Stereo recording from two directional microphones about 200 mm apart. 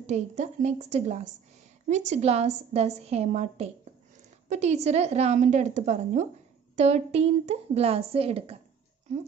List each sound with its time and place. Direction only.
0.0 s speech: 35° right (ahead or behind)